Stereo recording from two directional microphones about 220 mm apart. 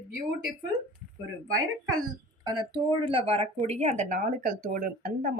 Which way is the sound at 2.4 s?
20° right (ahead or behind).